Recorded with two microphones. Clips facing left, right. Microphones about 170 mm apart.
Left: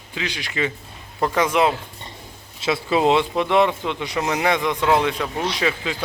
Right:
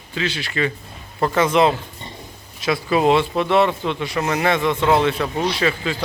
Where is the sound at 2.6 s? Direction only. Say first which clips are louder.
Right 1 dB; 25° left (ahead or behind).